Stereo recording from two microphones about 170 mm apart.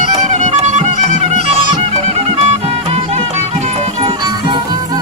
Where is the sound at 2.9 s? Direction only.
35° right (ahead or behind).